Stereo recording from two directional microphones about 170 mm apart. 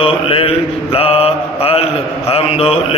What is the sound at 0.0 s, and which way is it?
Mantra, 35° left (ahead or behind).